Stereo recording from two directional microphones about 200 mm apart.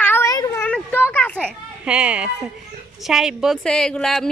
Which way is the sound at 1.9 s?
5° right (ahead or behind).